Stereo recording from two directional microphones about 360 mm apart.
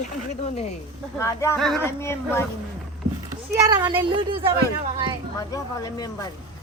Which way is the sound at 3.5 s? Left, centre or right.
Centre.